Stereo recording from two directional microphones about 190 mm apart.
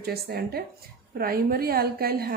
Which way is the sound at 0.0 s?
55° right (ahead or behind).